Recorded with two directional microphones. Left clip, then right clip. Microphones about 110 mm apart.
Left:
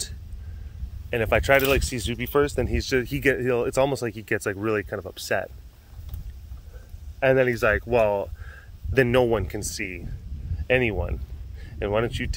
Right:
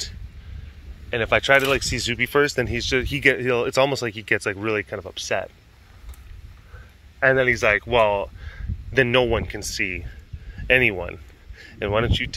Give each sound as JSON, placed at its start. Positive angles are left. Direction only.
{"t": 1.1, "sound": "speech", "side_deg": 35}
{"t": 2.0, "sound": "speech", "side_deg": 15}
{"t": 2.8, "sound": "speech", "side_deg": 35}
{"t": 3.4, "sound": "speech", "side_deg": 15}
{"t": 4.6, "sound": "speech", "side_deg": 45}
{"t": 5.1, "sound": "speech", "side_deg": 65}
{"t": 7.3, "sound": "speech", "side_deg": 50}
{"t": 9.6, "sound": "speech", "side_deg": 25}
{"t": 11.5, "sound": "a sound", "side_deg": 5}
{"t": 12.1, "sound": "speech", "side_deg": 35}